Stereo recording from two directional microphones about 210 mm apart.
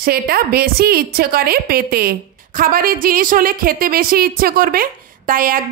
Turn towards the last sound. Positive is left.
turn(degrees=-40)  # may be behind; listen again after turning